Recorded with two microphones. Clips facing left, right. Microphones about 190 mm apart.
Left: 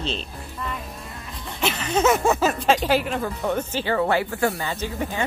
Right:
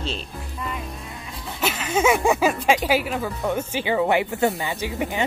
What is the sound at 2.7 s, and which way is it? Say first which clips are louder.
Speech: even; 10° right (ahead or behind).